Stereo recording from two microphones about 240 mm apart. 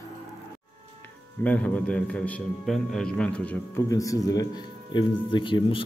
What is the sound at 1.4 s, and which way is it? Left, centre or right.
A man's voice, centre.